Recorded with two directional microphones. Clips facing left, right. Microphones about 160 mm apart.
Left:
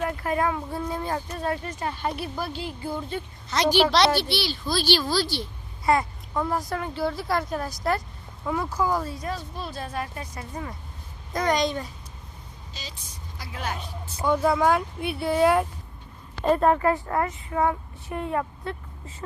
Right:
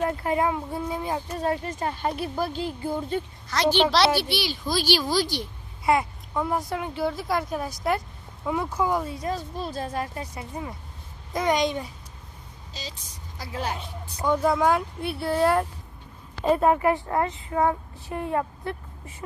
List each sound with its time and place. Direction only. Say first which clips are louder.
0.0 s a woman's voice: right 1 dB; 30° right (ahead or behind); by 1.2 s 15° right (ahead or behind)
1.3 s speech: right 2 dB; 30° right (ahead or behind)
3.5 s a child's voice: even; 20° left (ahead or behind)
3.9 s a woman's voice: even; 10° right (ahead or behind)
6.9 s speech: even; centre (ahead or behind)
7.6 s a woman's voice: even; 15° right (ahead or behind)
9.3 s speech: right 3 dB; 40° right (ahead or behind)
9.9 s speech: right 2 dB; 25° right (ahead or behind)
10.3 s a woman's voice: right 1 dB; 15° right (ahead or behind)
13.4 s speech: right 2 dB; 30° right (ahead or behind)
14.2 s speech: even; 5° left (ahead or behind)
16.4 s speech: even; 10° right (ahead or behind)